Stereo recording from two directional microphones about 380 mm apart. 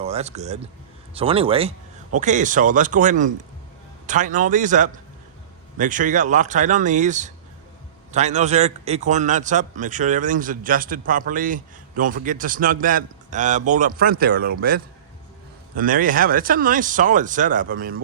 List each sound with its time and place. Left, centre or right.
0.0 s a man's voice: centre